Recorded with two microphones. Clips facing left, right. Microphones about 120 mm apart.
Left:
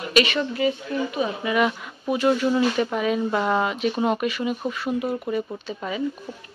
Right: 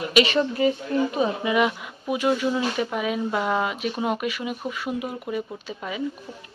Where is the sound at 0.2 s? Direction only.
30° right (ahead or behind).